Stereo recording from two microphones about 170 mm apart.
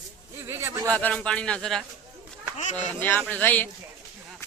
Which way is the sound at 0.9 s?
10° left (ahead or behind).